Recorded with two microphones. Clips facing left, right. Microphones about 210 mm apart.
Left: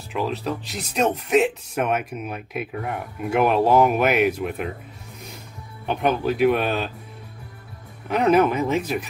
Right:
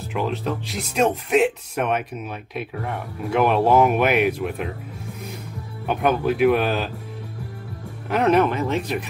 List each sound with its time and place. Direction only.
0.1 s speech: centre (ahead or behind)
5.9 s speech: 5° right (ahead or behind)
8.1 s speech: centre (ahead or behind)